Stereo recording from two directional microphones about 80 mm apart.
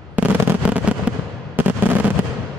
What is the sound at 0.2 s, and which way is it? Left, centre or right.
Fireworks, centre.